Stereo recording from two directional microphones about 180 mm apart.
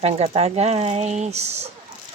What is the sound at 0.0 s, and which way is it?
Speech, 35° right (ahead or behind).